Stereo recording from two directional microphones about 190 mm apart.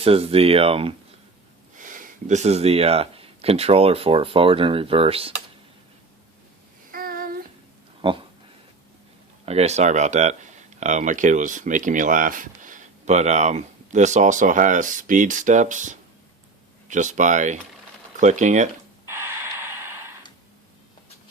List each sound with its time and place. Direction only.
0.0 s speech: 30° right (ahead or behind)
1.7 s speech: 45° right (ahead or behind)
6.9 s child singing: 50° right (ahead or behind)
8.0 s speech: 30° right (ahead or behind)
9.5 s speech: 35° right (ahead or behind)
19.0 s snort: 15° right (ahead or behind)